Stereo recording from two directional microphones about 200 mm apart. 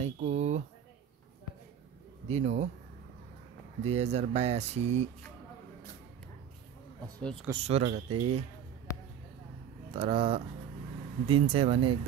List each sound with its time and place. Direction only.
0.0 s a sound: 35° right (ahead or behind)
2.2 s speech: 35° right (ahead or behind)
3.8 s speech: 35° right (ahead or behind)
7.2 s speech: 5° left (ahead or behind)
7.6 s speech: 30° right (ahead or behind)
9.8 s speech: 25° right (ahead or behind)